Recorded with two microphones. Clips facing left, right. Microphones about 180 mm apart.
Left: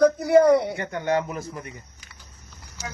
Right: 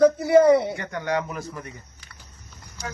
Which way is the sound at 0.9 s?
25° left (ahead or behind).